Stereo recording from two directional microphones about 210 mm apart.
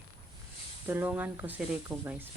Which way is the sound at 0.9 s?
10° right (ahead or behind).